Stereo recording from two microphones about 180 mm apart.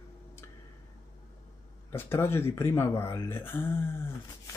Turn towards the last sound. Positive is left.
turn(degrees=10)  # may be behind; listen again after turning